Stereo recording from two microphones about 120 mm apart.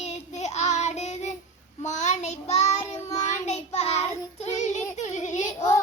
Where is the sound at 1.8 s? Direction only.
80° left.